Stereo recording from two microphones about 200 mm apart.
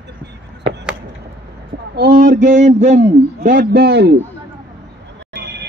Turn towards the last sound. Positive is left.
turn(degrees=-55)  # may be behind; listen again after turning